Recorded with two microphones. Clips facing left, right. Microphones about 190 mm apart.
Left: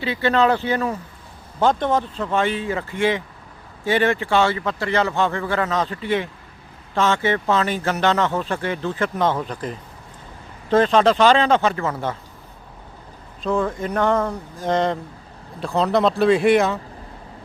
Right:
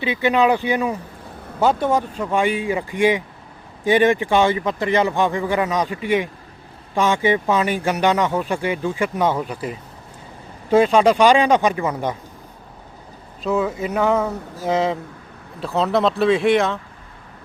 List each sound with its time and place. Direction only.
0.0 s speech: 15° right (ahead or behind)
13.4 s speech: 5° right (ahead or behind)